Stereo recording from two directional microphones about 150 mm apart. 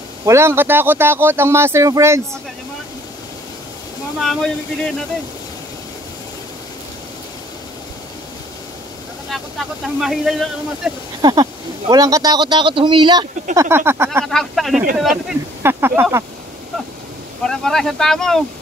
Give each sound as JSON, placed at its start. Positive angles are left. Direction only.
{"t": 0.2, "sound": "speech", "side_deg": -20}
{"t": 4.2, "sound": "speech", "side_deg": 0}
{"t": 9.9, "sound": "speech", "side_deg": 0}
{"t": 11.1, "sound": "speech", "side_deg": -30}
{"t": 13.6, "sound": "speech", "side_deg": -15}
{"t": 14.2, "sound": "speech", "side_deg": 5}
{"t": 15.6, "sound": "speech", "side_deg": -15}
{"t": 17.4, "sound": "speech", "side_deg": 5}